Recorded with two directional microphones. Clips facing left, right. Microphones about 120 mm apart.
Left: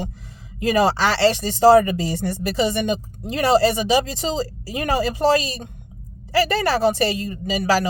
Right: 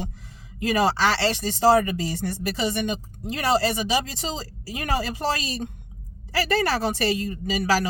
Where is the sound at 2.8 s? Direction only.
25° left (ahead or behind).